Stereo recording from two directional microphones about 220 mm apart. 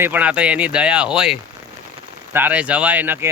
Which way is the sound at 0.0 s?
5° right (ahead or behind).